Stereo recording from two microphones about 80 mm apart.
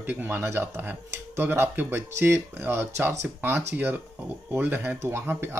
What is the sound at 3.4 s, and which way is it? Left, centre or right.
Speech, right.